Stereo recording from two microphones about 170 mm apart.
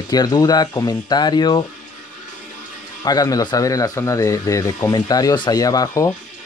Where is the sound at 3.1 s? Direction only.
20° left (ahead or behind).